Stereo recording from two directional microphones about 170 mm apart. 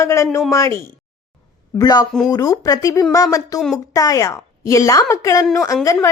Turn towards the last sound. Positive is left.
turn(degrees=15)  # may be behind; listen again after turning